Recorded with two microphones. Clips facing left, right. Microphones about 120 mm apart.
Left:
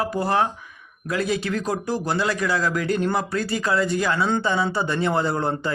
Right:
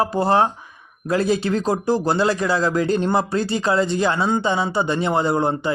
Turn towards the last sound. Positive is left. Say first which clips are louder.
# right 3 dB
turn(degrees=-15)  # may be behind; listen again after turning